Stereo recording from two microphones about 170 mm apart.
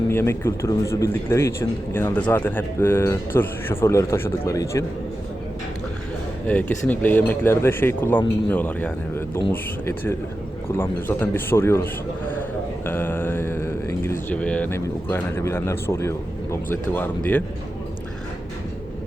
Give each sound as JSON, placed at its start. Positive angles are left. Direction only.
{"t": 0.1, "sound": "a man's voice", "side_deg": 15}
{"t": 6.5, "sound": "a man's voice", "side_deg": 10}